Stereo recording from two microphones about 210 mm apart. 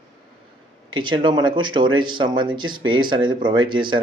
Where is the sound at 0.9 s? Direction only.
20° right (ahead or behind).